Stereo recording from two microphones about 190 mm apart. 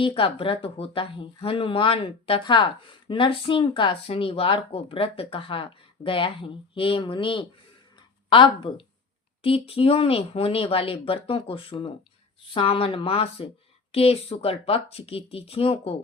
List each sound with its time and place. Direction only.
0.0 s speech: 30° left (ahead or behind)